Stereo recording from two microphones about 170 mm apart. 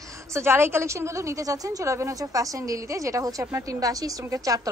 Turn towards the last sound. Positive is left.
turn(degrees=-20)  # may be behind; listen again after turning